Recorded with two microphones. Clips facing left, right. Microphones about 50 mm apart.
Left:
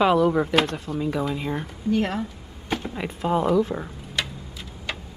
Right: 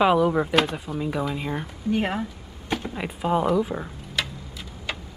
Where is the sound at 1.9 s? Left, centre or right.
Centre.